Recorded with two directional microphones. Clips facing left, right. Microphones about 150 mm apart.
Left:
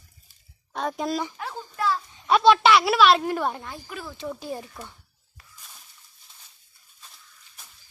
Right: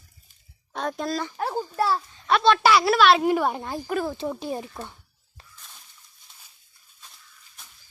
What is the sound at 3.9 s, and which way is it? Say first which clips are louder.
Speech: right 14 dB; 50° right (ahead or behind).